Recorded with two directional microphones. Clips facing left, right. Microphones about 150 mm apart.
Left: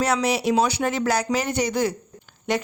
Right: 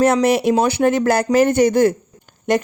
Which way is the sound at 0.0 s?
50° right (ahead or behind).